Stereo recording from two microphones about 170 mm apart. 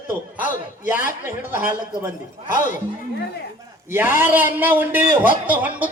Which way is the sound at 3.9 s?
10° right (ahead or behind).